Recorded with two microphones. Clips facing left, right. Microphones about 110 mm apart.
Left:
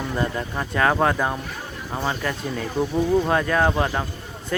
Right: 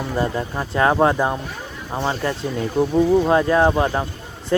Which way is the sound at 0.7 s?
25° right (ahead or behind).